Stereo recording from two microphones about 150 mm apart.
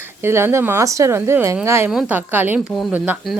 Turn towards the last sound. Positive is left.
turn(degrees=-10)  # may be behind; listen again after turning